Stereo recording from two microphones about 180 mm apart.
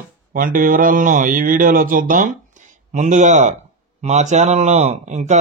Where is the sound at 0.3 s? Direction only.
50° right (ahead or behind).